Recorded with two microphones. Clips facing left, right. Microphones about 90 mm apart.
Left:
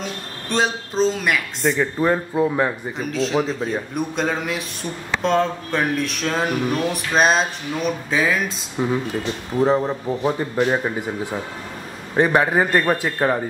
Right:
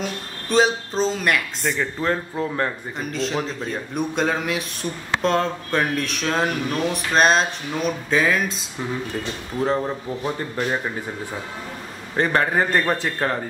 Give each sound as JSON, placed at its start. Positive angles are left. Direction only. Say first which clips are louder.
{"t": 0.0, "sound": "speech", "louder": "right 1 dB", "side_deg": -5}
{"t": 1.8, "sound": "a man's voice", "louder": "left 3 dB", "side_deg": 15}
{"t": 3.0, "sound": "speech", "louder": "left 4 dB", "side_deg": 0}
{"t": 8.8, "sound": "a man's voice", "louder": "left 5 dB", "side_deg": 15}
{"t": 12.2, "sound": "a man's voice", "louder": "left 3 dB", "side_deg": 10}